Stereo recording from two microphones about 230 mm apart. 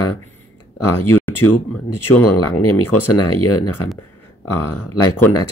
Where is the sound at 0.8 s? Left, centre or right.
Left.